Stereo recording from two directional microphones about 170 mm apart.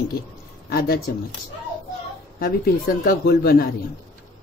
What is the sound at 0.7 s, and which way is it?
Speech, 65° left (ahead or behind).